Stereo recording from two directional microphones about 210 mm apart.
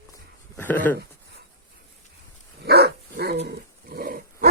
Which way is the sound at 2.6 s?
50° right (ahead or behind).